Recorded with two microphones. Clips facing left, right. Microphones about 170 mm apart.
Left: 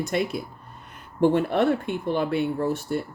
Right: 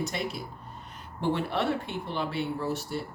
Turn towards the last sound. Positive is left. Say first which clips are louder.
# left 6 dB
turn(degrees=50)  # may be behind; listen again after turning